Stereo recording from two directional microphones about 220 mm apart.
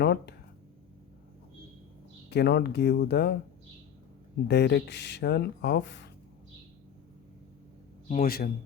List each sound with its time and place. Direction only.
0.0 s speech: 50° left (ahead or behind)
2.3 s speech: 50° left (ahead or behind)
4.4 s speech: 50° left (ahead or behind)
8.0 s a man's voice: 40° left (ahead or behind)